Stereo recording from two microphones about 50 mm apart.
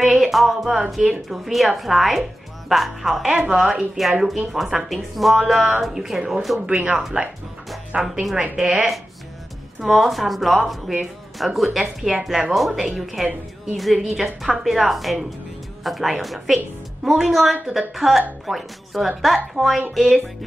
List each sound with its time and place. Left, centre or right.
0.0 s speech: centre
6.7 s speech: right
7.9 s speech: centre
9.8 s speech: centre